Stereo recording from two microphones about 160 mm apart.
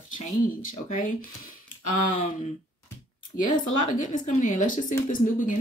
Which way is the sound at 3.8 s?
50° left (ahead or behind).